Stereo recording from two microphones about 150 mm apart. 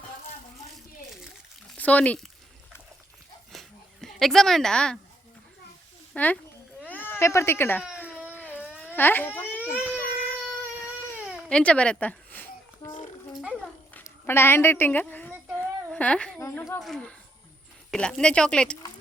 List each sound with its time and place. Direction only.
1.7 s speech: 10° left (ahead or behind)
3.5 s a sound: centre (ahead or behind)
6.1 s speech: 10° left (ahead or behind)
7.9 s baby cry: 15° left (ahead or behind)
8.3 s a sound: 10° left (ahead or behind)
8.8 s crying: 15° left (ahead or behind)
11.4 s a sound: 5° left (ahead or behind)
13.3 s a child's voice: 5° right (ahead or behind)
14.0 s speech: 15° left (ahead or behind)
15.5 s a sound: 10° left (ahead or behind)
16.4 s speech: 20° left (ahead or behind)
16.8 s speech: 5° left (ahead or behind)